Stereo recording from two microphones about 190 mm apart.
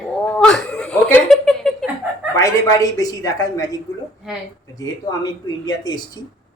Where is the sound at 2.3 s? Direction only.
15° left (ahead or behind).